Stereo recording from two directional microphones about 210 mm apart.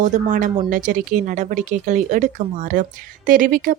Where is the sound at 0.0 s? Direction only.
35° right (ahead or behind).